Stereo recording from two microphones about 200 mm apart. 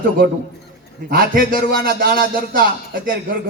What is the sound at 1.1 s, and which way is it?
A man's voice, 45° right (ahead or behind).